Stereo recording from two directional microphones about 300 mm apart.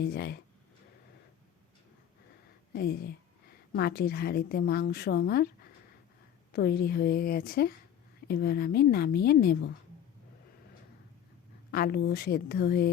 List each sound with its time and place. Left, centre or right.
0.0 s a woman's voice: left
2.7 s a woman's voice: left
6.5 s a woman's voice: left
11.7 s a woman's voice: left